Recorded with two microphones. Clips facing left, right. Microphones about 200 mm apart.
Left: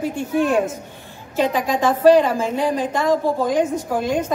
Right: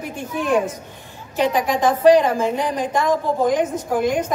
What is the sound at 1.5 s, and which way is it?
A woman's voice, 15° right (ahead or behind).